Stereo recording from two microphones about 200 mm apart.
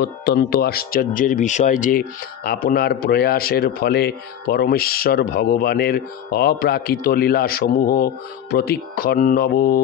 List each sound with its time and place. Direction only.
0.0 s speech: 55° left (ahead or behind)